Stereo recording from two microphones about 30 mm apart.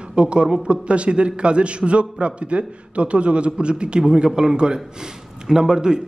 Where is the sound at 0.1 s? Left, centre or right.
Right.